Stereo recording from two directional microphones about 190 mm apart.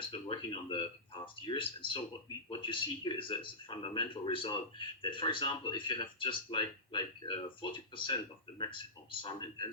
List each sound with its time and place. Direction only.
0.1 s speech: 25° left (ahead or behind)